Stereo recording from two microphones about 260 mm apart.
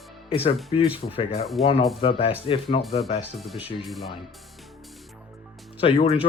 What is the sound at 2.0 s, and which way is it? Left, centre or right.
Speech, left.